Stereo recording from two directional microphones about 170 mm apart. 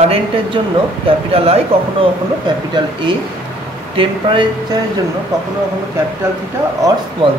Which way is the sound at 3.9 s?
30° right (ahead or behind).